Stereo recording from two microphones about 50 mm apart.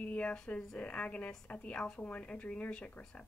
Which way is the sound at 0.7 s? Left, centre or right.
Left.